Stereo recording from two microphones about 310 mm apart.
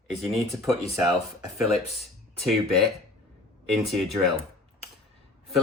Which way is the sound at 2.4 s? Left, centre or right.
Centre.